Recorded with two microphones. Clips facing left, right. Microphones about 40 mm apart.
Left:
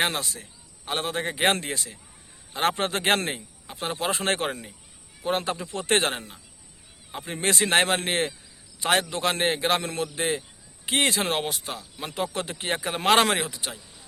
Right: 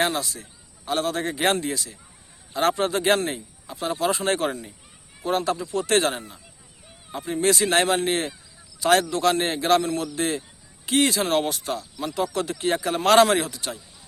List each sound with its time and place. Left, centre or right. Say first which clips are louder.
0.0 s speech: right 2 dB; left
0.9 s a man's voice: right 3 dB; left
10.8 s speech: right 3 dB; left
11.3 s speech: right 5 dB; centre
11.9 s a man's voice: right 3 dB; left
13.4 s speech: right 2 dB; centre